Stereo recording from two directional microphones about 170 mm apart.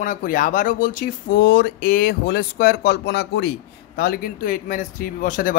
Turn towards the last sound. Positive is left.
turn(degrees=50)  # may be behind; listen again after turning